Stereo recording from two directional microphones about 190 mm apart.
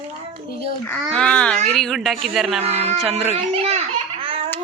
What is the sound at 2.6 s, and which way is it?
Speech, 35° right (ahead or behind).